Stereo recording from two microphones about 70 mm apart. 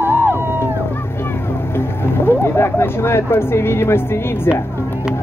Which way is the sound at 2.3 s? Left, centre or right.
Left.